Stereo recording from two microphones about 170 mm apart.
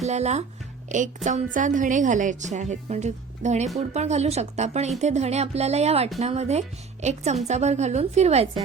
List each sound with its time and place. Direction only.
0.0 s a woman's voice: 40° right (ahead or behind)